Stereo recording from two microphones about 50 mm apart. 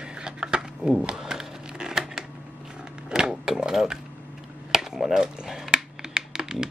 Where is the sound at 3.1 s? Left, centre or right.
Centre.